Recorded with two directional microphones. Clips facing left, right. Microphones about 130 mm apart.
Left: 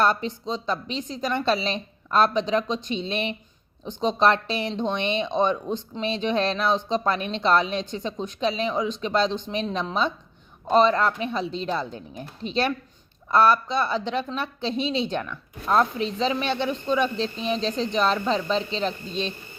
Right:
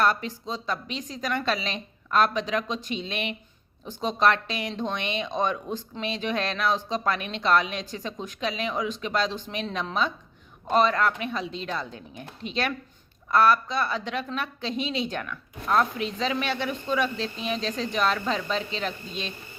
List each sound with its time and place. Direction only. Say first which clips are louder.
0.0 s speech: left 2 dB; 25° left (ahead or behind)